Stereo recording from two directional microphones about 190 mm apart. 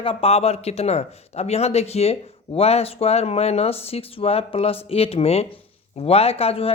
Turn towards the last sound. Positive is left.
turn(degrees=30)  # may be behind; listen again after turning